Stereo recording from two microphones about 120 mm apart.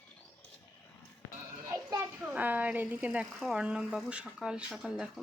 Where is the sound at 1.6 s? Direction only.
30° right (ahead or behind).